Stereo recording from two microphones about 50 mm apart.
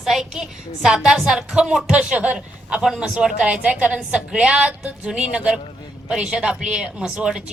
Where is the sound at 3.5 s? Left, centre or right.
Right.